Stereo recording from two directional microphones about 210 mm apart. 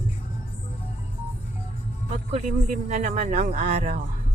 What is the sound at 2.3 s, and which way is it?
A man's voice, 35° right (ahead or behind).